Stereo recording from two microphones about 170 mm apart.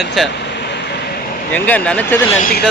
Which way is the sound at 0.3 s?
85° left.